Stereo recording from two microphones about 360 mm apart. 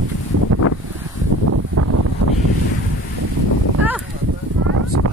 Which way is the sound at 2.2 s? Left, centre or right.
Right.